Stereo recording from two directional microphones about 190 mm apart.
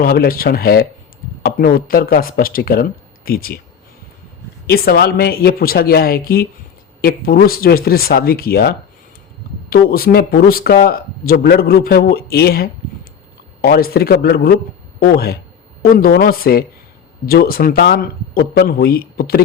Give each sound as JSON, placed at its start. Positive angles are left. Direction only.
{"t": 0.0, "sound": "speech", "side_deg": 55}
{"t": 4.6, "sound": "speech", "side_deg": 55}